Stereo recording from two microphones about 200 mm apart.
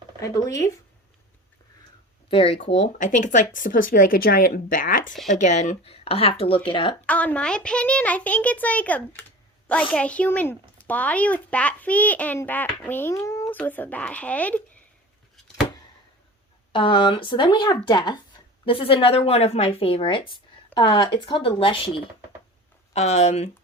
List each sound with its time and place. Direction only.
0.2 s a child's voice: 15° left (ahead or behind)
2.3 s a woman's voice: 30° left (ahead or behind)
7.0 s a child's voice: 5° left (ahead or behind)
16.7 s a woman's voice: 25° left (ahead or behind)